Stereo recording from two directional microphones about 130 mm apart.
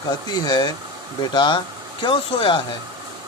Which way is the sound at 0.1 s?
30° left (ahead or behind).